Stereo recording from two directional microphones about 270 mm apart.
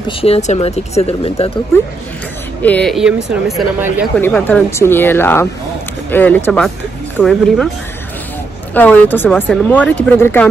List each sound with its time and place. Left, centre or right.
0.2 s speech: left
2.6 s speech: centre
8.7 s speech: centre